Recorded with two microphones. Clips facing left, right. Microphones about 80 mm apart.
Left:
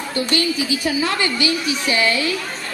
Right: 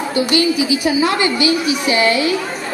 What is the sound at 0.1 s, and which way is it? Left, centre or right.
A woman's voice, centre.